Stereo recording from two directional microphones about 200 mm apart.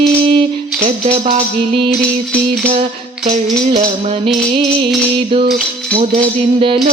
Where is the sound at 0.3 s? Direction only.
30° right (ahead or behind).